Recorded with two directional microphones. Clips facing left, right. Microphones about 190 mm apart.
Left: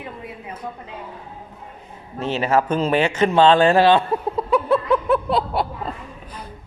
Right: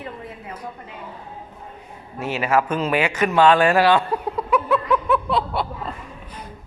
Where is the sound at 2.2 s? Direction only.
35° left (ahead or behind).